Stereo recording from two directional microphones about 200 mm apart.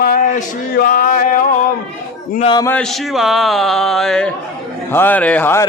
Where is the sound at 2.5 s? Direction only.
20° left (ahead or behind).